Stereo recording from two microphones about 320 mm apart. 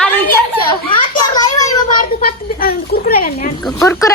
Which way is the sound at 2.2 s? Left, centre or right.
Left.